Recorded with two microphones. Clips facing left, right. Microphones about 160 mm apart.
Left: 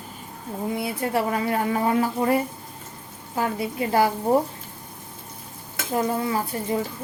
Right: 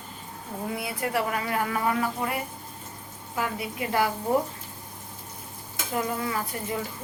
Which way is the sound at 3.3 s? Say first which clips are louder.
Left 5 dB; 30° left (ahead or behind).